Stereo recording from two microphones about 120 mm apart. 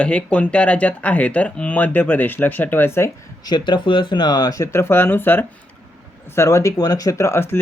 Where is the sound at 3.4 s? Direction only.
40° left (ahead or behind); by 7.5 s 20° left (ahead or behind).